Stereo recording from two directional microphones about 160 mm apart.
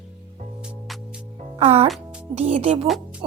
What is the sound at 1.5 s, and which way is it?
A woman's voice, 40° right (ahead or behind).